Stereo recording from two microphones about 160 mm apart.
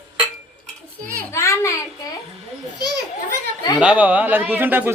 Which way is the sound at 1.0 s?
15° left (ahead or behind).